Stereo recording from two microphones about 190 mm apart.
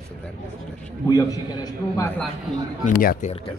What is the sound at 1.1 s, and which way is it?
A man's voice, 20° left (ahead or behind).